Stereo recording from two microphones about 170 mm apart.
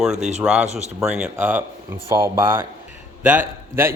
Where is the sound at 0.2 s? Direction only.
40° right (ahead or behind).